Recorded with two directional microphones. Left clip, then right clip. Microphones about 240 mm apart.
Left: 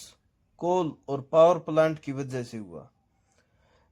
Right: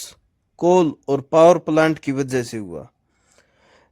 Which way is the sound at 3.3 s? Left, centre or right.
Right.